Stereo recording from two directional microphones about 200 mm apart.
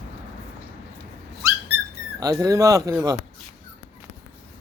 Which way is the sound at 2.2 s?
20° right (ahead or behind).